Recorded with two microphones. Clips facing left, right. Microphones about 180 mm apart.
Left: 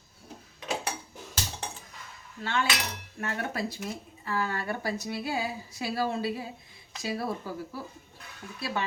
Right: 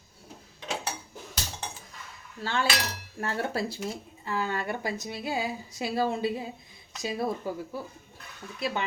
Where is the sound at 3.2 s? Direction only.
30° right (ahead or behind).